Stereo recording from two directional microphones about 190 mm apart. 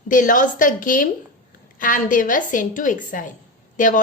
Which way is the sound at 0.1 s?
45° left (ahead or behind).